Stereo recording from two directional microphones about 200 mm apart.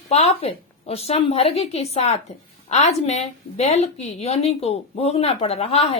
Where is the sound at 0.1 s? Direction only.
30° left (ahead or behind).